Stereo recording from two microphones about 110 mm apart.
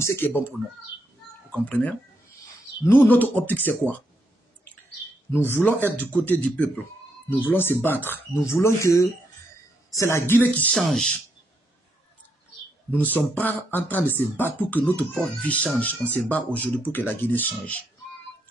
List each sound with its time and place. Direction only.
0.0 s speech: 20° left (ahead or behind)
5.3 s speech: 20° left (ahead or behind)
10.7 s speech: 5° left (ahead or behind)
12.9 s speech: 15° left (ahead or behind)